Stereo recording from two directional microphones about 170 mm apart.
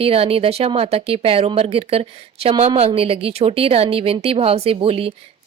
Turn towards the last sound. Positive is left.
turn(degrees=-35)  # may be behind; listen again after turning